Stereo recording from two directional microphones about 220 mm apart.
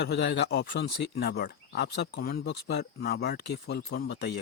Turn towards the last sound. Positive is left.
turn(degrees=50)  # may be behind; listen again after turning